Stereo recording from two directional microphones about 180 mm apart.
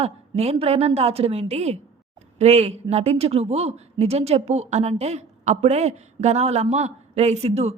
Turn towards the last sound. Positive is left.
turn(degrees=-35)  # may be behind; listen again after turning